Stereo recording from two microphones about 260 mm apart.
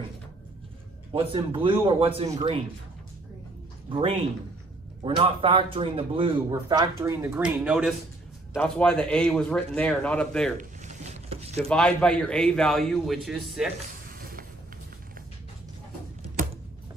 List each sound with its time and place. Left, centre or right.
1.1 s speech: centre
3.9 s speech: right; by 10.5 s centre
10.6 s a sound: right
11.6 s speech: centre
14.0 s mechanisms: right